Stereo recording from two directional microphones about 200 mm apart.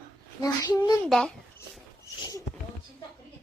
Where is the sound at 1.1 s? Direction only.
5° left (ahead or behind).